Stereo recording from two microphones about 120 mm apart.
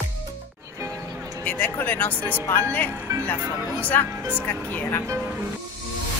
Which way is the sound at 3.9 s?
15° left (ahead or behind).